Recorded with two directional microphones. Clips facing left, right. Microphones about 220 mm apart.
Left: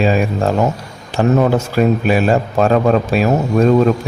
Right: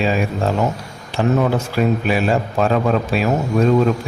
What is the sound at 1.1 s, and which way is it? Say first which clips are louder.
A man's voice: left 4 dB; 45° left (ahead or behind).